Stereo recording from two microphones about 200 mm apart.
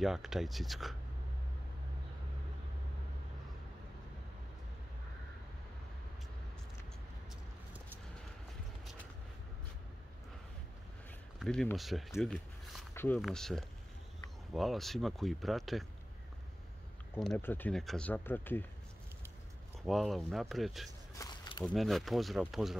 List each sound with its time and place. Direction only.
0.0 s speech: centre (ahead or behind)
11.3 s speech: 5° left (ahead or behind)
12.9 s a sound: 10° left (ahead or behind)
13.2 s speech: centre (ahead or behind)
17.2 s speech: 5° left (ahead or behind)
19.8 s speech: centre (ahead or behind)
21.2 s a sound: 20° left (ahead or behind)
21.6 s speech: centre (ahead or behind)